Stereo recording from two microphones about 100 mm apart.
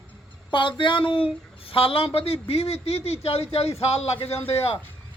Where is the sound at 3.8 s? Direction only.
90° left.